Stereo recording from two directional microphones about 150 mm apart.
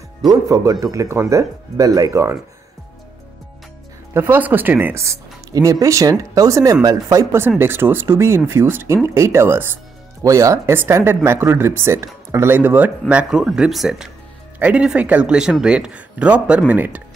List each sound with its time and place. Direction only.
0.2 s speech: 25° right (ahead or behind)
4.1 s speech: 15° right (ahead or behind)